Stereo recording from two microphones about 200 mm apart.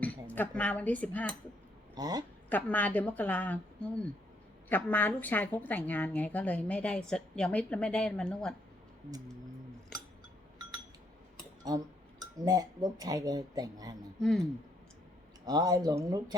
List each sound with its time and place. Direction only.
0.0 s speech: 10° left (ahead or behind)
2.0 s speech: 20° right (ahead or behind)
2.5 s speech: 10° left (ahead or behind)
11.7 s speech: 20° right (ahead or behind)
15.4 s speech: 20° right (ahead or behind)